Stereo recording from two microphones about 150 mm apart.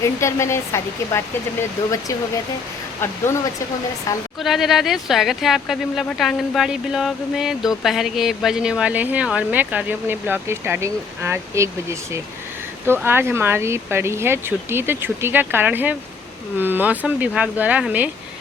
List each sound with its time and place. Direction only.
0.0 s speech: 20° left (ahead or behind)
3.0 s speech: 15° left (ahead or behind)
4.4 s speech: centre (ahead or behind)